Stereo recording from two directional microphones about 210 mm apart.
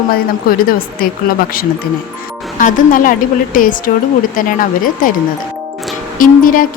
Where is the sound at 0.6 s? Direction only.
45° left (ahead or behind).